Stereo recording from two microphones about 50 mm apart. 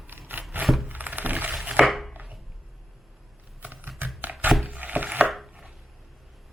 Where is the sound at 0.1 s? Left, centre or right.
Right.